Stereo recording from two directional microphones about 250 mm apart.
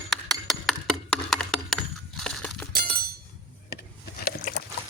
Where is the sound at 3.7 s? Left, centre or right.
Left.